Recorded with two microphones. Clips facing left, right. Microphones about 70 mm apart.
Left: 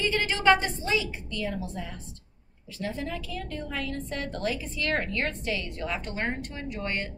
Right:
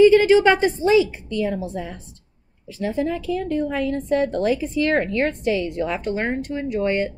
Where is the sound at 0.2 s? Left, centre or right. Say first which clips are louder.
Right 8 dB; centre.